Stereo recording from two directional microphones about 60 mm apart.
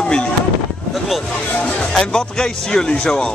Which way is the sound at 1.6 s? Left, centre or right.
Centre.